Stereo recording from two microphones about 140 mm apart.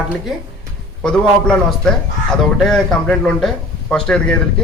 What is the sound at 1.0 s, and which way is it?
A man's voice, 5° left (ahead or behind).